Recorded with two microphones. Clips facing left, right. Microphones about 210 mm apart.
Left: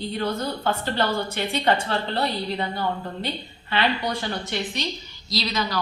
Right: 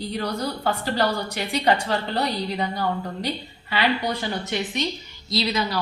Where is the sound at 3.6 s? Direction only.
10° right (ahead or behind).